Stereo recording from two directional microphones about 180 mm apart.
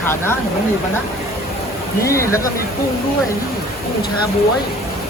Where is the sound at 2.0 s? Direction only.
15° left (ahead or behind).